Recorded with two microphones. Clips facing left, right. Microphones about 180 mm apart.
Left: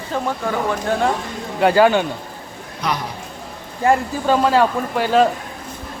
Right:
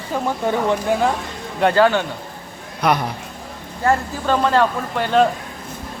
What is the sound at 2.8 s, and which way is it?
Speech, 60° right (ahead or behind).